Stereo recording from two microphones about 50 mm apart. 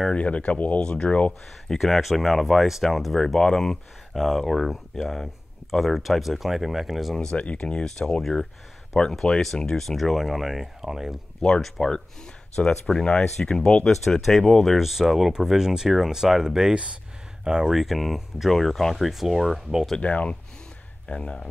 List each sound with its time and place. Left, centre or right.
0.1 s speech: left
1.8 s speech: centre
7.3 s speech: left
7.8 s speech: centre
11.4 s speech: centre
14.8 s speech: centre
20.0 s speech: left